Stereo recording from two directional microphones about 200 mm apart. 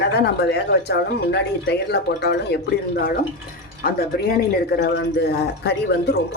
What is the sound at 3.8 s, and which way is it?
Speech, 50° left (ahead or behind).